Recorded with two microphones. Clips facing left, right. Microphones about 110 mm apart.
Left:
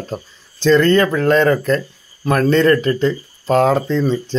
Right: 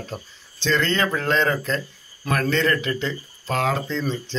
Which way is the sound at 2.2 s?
35° left (ahead or behind).